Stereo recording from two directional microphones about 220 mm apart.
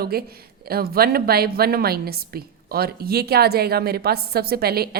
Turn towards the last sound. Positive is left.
turn(degrees=-45)  # may be behind; listen again after turning